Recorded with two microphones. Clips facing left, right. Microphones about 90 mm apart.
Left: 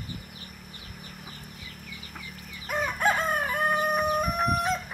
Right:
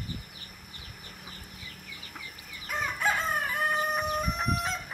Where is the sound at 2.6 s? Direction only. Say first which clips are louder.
Left 4 dB; 55° left (ahead or behind).